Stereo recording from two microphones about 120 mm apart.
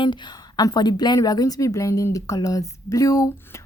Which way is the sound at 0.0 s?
40° left (ahead or behind).